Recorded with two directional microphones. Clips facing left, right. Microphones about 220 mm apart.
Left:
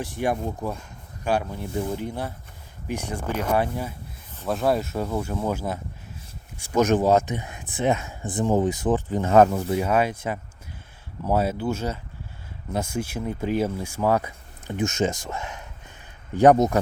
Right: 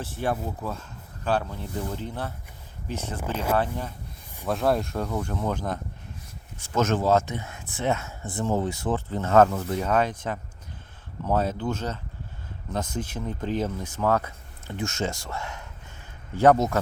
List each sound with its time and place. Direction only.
0.0 s speech: 15° left (ahead or behind)